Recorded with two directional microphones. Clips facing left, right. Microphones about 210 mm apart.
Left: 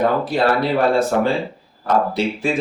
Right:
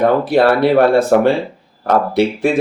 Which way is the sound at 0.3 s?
65° right (ahead or behind).